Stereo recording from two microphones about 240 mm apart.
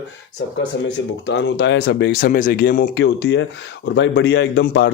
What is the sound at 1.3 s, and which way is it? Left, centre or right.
Speech, left.